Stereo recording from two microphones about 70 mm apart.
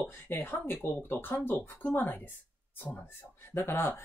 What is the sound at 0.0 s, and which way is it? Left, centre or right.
Speech, left.